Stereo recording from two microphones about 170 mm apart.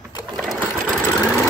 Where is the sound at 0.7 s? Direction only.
15° left (ahead or behind).